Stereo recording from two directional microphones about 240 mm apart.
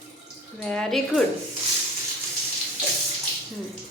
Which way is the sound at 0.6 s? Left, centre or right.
Centre.